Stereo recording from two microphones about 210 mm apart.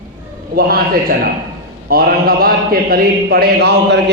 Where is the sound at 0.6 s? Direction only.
45° right (ahead or behind).